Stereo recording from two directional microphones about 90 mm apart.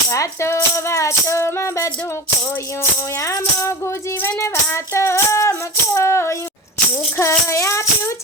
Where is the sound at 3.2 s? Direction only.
35° left (ahead or behind).